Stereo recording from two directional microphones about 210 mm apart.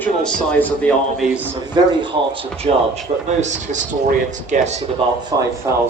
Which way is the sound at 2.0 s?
25° right (ahead or behind).